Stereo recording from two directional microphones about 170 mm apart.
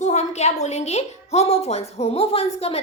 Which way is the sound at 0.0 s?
40° left (ahead or behind).